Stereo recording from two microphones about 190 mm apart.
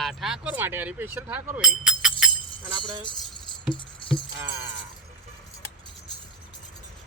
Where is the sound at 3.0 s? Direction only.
25° left (ahead or behind).